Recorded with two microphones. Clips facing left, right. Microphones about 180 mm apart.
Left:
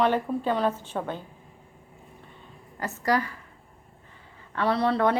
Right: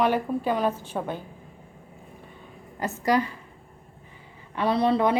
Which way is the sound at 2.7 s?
20° right (ahead or behind).